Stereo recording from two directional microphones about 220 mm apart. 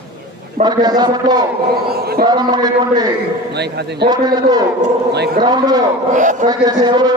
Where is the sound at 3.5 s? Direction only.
50° right (ahead or behind).